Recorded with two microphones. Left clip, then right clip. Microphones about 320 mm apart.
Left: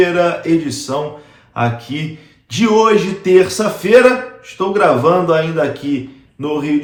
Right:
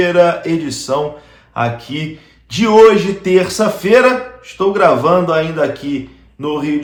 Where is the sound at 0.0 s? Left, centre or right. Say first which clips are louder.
Right 2 dB; centre.